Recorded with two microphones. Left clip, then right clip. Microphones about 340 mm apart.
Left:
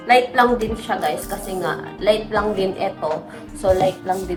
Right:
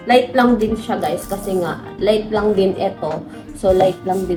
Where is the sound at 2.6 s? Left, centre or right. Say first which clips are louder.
Right 5 dB; left.